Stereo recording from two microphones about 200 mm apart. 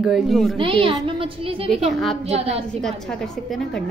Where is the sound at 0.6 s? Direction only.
25° right (ahead or behind).